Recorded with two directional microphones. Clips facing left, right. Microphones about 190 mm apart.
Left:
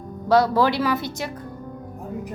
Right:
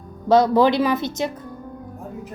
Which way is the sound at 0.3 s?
20° right (ahead or behind).